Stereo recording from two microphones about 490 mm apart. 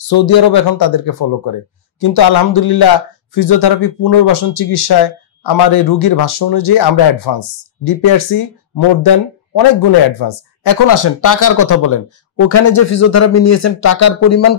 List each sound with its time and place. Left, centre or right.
0.0 s speech: left